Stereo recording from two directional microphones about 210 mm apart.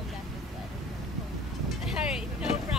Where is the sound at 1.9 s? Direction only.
5° right (ahead or behind).